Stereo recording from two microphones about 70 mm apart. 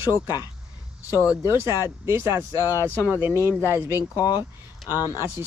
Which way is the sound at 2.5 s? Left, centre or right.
Left.